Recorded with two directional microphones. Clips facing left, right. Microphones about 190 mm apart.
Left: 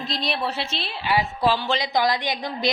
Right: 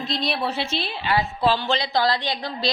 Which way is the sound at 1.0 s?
10° left (ahead or behind).